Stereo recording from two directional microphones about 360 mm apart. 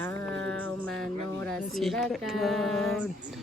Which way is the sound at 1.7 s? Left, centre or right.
Centre.